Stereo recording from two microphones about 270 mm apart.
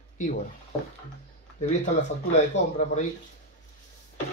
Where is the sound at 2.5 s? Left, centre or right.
Left.